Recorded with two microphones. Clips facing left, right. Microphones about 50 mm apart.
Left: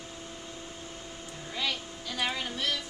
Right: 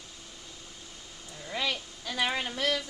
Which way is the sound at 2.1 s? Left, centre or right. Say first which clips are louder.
Right 2 dB; right.